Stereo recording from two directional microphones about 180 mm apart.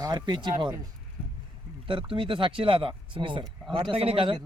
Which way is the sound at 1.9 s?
30° right (ahead or behind).